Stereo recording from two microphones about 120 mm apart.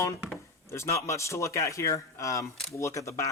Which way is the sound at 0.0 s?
25° left (ahead or behind).